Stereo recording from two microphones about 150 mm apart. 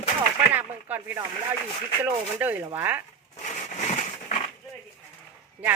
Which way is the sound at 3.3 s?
50° left (ahead or behind).